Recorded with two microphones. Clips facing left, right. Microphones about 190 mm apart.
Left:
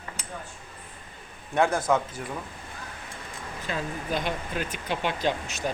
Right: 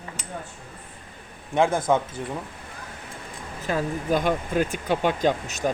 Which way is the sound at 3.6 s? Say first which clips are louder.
Right 7 dB; 45° right (ahead or behind).